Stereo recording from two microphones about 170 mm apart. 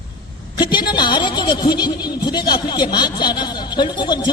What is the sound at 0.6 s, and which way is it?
A man's voice, 25° left (ahead or behind).